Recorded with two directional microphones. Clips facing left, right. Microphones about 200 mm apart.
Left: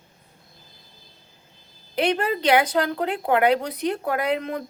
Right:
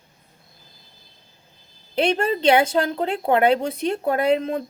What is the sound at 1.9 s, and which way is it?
Speech, 25° right (ahead or behind).